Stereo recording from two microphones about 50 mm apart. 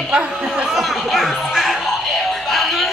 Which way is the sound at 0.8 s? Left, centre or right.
Centre.